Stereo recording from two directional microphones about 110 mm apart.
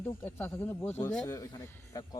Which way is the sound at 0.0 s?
15° left (ahead or behind).